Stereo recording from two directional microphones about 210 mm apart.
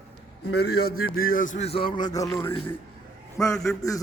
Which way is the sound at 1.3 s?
40° left (ahead or behind).